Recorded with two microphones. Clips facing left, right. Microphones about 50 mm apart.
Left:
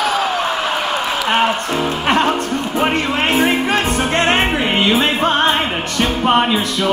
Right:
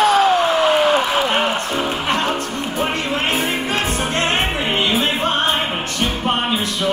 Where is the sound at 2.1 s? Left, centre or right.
Left.